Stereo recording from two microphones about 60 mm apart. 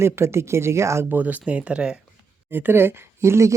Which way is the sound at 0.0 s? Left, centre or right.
Right.